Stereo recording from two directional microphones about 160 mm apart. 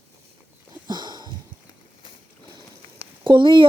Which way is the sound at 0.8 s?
25° right (ahead or behind).